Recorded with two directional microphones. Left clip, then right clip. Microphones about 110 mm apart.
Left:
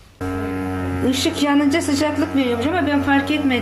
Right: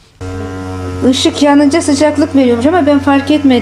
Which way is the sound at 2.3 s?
60° right (ahead or behind).